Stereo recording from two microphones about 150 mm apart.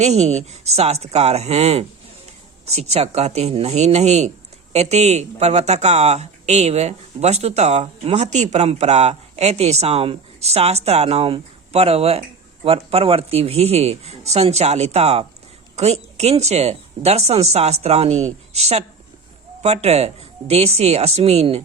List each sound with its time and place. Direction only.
0.0 s speech: 45° right (ahead or behind)